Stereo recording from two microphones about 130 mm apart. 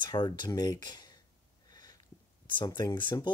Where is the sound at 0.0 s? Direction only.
35° left (ahead or behind).